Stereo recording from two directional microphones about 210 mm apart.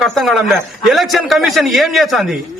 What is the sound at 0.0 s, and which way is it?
A man's voice, centre (ahead or behind).